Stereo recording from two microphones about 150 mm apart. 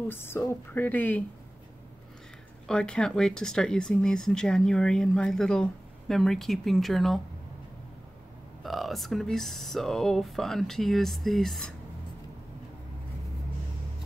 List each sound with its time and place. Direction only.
0.1 s a woman's voice: 15° left (ahead or behind)
2.7 s speech: 5° left (ahead or behind)
8.6 s speech: centre (ahead or behind)